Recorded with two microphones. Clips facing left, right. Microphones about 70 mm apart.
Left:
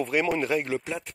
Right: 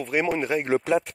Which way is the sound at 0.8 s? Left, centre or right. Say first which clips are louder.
Right 11 dB; right.